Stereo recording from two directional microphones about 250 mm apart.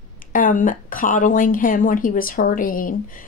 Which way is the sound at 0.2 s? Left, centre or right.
Left.